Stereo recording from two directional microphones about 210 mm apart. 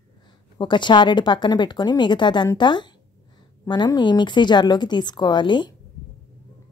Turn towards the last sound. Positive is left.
turn(degrees=20)  # may be behind; listen again after turning